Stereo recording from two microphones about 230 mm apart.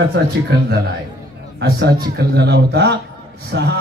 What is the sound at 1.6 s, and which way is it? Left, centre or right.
A man's voice, right.